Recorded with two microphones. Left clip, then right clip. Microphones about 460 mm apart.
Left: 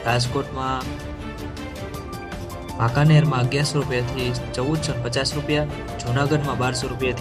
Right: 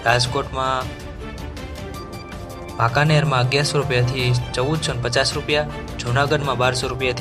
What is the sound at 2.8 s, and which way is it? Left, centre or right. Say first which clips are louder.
Speech: right 3 dB; centre.